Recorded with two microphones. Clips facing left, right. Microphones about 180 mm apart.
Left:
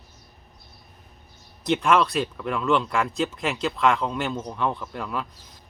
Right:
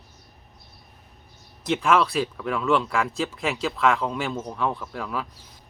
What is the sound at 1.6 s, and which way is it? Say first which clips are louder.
Speech: left 1 dB; centre (ahead or behind).